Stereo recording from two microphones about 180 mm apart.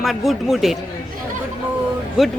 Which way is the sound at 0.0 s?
Centre (ahead or behind).